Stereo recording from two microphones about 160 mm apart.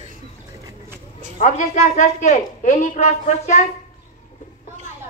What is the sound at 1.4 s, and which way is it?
A woman's voice, 50° left (ahead or behind).